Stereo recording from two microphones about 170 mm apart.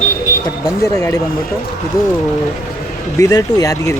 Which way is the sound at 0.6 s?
20° left (ahead or behind).